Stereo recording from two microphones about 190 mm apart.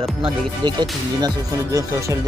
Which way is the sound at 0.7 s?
20° right (ahead or behind).